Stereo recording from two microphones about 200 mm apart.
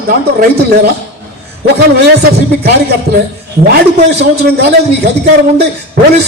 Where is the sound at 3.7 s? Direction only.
55° right (ahead or behind).